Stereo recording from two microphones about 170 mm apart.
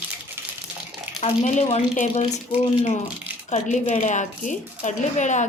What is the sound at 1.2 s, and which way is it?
Speech, 45° left (ahead or behind).